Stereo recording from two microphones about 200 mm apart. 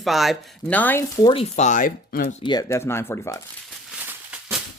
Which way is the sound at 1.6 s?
40° left (ahead or behind).